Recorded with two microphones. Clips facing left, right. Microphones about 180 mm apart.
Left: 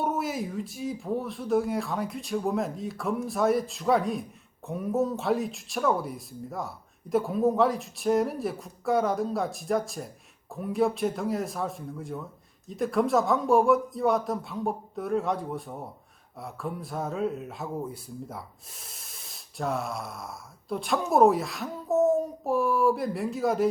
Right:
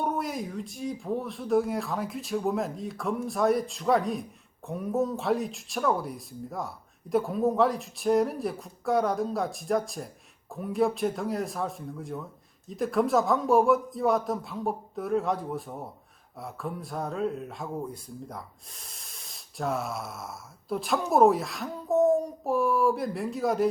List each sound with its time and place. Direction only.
0.0 s speech: 5° left (ahead or behind)